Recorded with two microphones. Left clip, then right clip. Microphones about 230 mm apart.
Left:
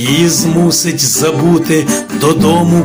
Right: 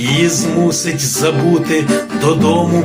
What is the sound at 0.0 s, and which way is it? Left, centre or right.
Music, left.